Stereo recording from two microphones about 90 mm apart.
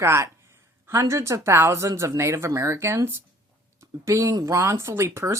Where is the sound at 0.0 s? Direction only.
30° right (ahead or behind).